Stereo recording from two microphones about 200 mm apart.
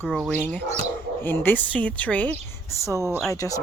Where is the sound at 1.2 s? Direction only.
10° left (ahead or behind).